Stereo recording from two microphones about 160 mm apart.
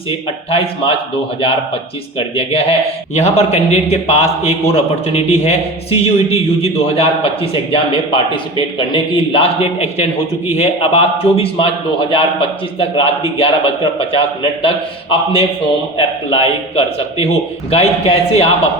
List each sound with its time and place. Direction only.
0.5 s a man's voice: 35° left (ahead or behind)